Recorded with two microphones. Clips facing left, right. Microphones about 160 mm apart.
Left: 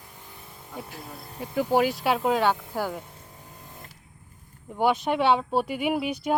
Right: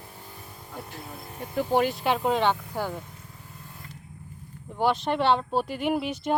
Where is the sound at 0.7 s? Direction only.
Centre (ahead or behind).